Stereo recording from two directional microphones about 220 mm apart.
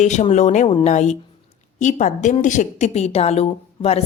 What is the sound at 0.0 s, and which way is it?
A woman's voice, 30° left (ahead or behind).